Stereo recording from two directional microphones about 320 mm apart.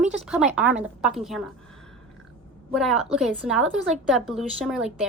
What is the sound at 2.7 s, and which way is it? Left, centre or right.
Speech, centre.